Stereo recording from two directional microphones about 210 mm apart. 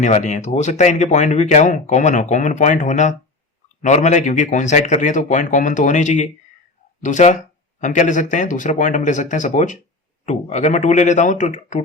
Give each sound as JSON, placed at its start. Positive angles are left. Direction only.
{"t": 0.0, "sound": "speech", "side_deg": 35}